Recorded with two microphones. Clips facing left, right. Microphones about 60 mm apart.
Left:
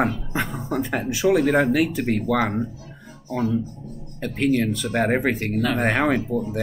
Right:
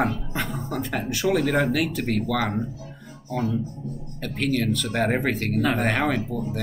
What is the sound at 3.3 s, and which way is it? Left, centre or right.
Speech, centre.